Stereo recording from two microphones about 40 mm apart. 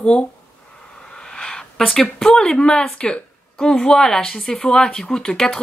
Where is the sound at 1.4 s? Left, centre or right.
Centre.